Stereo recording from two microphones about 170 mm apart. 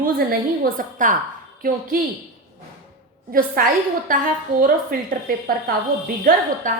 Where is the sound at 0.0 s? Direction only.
60° right (ahead or behind).